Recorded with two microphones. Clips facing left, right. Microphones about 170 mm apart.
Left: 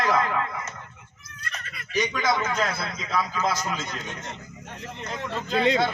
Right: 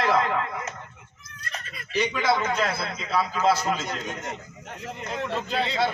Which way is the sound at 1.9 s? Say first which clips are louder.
Right 1 dB; 30° right (ahead or behind).